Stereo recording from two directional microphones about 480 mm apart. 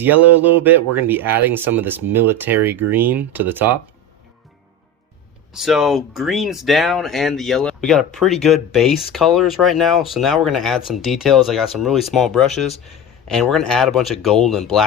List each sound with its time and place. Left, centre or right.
0.0 s speech: centre
5.5 s speech: centre